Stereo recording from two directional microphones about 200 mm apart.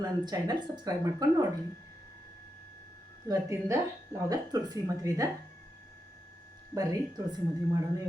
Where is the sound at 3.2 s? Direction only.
15° right (ahead or behind).